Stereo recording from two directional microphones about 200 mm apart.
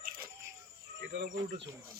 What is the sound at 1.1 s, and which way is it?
Speech, 60° right (ahead or behind).